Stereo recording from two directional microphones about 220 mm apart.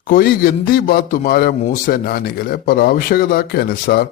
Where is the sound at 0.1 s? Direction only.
40° left (ahead or behind).